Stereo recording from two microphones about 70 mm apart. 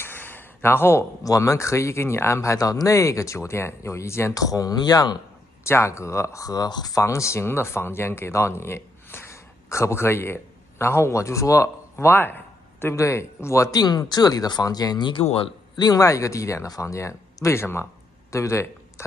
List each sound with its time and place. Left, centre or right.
0.0 s a sound: left
1.2 s speech: left
4.3 s speech: left
5.7 s speech: left
7.0 s speech: left
12.1 s speech: left
12.9 s speech: left
13.7 s speech: left
15.8 s speech: left